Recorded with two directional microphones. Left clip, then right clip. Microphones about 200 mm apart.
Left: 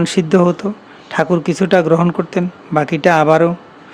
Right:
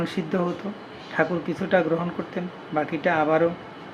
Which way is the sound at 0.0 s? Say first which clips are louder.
Left 13 dB; 60° left (ahead or behind).